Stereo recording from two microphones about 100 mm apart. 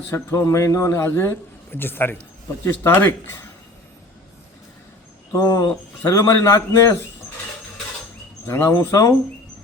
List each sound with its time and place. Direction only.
0.1 s a man's voice: 30° left (ahead or behind)
5.3 s speech: 30° left (ahead or behind)
8.4 s a man's voice: 25° left (ahead or behind)